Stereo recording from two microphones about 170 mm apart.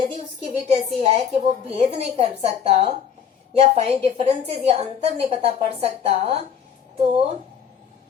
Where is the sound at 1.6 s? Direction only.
35° right (ahead or behind).